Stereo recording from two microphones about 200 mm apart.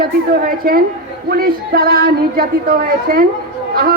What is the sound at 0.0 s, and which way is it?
Speech, 50° right (ahead or behind).